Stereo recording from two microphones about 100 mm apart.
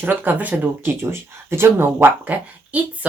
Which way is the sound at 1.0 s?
25° right (ahead or behind).